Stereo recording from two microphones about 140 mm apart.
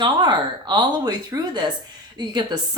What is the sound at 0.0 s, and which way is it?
Speech, 35° right (ahead or behind).